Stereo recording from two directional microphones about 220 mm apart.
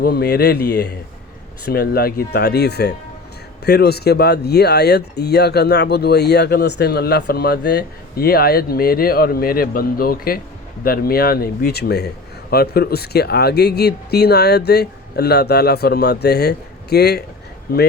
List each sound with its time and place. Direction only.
0.0 s speech: 45° left (ahead or behind)